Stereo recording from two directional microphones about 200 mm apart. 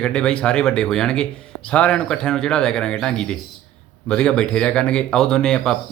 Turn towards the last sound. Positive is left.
turn(degrees=5)  # may be behind; listen again after turning